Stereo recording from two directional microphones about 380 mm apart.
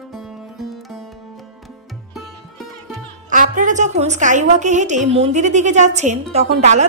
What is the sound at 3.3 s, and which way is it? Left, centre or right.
A woman's voice, centre.